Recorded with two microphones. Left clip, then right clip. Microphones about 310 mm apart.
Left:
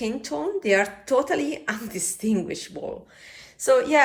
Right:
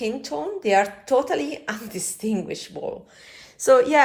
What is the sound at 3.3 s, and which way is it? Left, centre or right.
Speech, centre.